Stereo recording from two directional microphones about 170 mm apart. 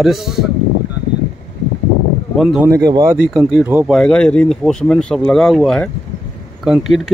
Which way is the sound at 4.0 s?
5° left (ahead or behind).